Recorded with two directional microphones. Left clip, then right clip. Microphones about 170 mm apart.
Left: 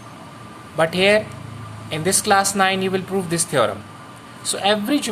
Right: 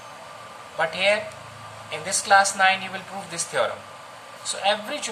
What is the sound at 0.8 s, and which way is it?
A woman's voice, 50° left (ahead or behind).